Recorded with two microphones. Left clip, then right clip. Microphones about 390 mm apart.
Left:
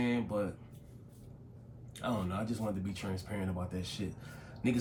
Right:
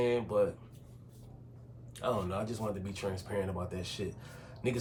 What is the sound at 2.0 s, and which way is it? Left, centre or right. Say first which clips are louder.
Speech: right 3 dB; centre.